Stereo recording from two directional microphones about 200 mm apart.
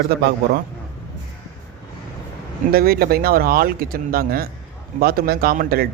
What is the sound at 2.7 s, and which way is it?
Speech, 50° right (ahead or behind).